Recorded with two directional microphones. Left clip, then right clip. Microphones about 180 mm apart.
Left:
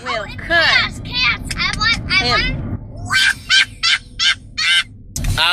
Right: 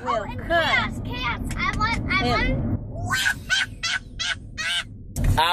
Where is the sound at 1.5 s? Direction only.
5° left (ahead or behind).